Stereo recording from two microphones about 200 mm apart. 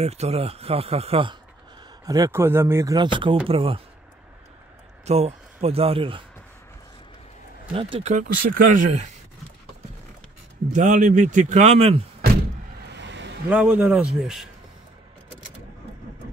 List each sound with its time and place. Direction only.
0.0 s speech: 30° right (ahead or behind)
2.0 s speech: 15° right (ahead or behind)
5.0 s speech: 30° right (ahead or behind)
7.7 s speech: 25° right (ahead or behind)
10.7 s speech: 40° right (ahead or behind)
12.8 s a sound: 60° right (ahead or behind)
13.5 s speech: 10° right (ahead or behind)